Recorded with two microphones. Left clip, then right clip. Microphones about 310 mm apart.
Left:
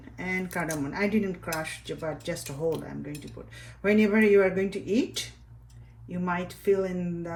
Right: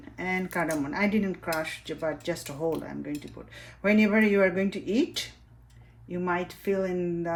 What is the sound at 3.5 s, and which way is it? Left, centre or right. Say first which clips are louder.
Speech: even; right.